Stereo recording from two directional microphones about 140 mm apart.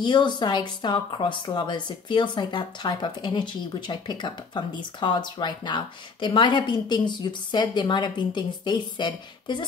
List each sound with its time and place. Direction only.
0.0 s speech: 35° left (ahead or behind)